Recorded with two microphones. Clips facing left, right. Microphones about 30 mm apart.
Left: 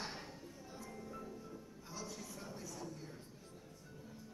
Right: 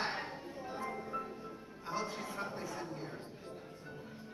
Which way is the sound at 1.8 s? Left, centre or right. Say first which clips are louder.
Right 10 dB; right.